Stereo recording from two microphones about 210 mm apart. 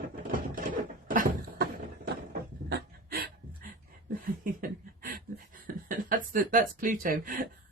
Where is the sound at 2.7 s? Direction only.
45° right (ahead or behind).